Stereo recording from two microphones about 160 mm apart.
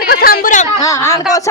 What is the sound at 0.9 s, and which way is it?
Speech, 20° left (ahead or behind).